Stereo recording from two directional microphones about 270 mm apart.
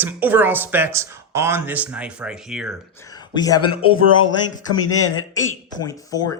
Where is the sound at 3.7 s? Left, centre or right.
Left.